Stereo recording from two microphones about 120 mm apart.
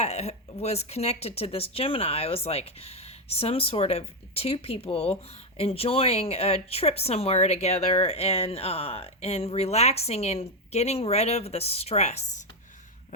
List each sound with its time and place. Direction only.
0.0 s speech: 60° left (ahead or behind)